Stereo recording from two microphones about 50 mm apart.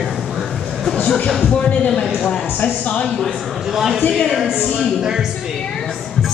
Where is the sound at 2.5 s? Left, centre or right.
Left.